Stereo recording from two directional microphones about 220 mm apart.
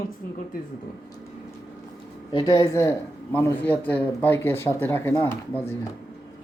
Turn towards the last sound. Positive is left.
turn(degrees=10)  # may be behind; listen again after turning